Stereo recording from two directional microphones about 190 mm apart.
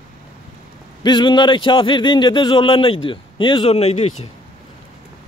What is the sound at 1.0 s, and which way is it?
Speech, 25° left (ahead or behind).